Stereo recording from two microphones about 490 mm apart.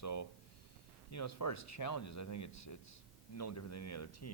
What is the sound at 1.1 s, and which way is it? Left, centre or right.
Speech, left.